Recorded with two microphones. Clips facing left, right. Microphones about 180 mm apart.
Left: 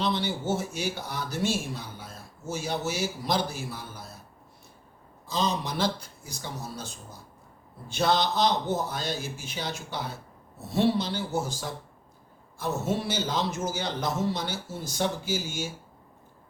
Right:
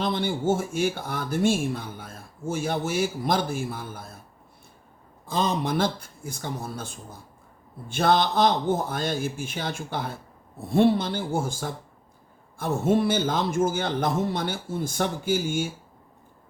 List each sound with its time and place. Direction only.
0.0 s speech: 50° right (ahead or behind)
5.2 s speech: 55° right (ahead or behind)